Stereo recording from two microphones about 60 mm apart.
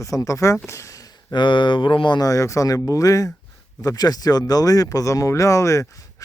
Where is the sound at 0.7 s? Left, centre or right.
Left.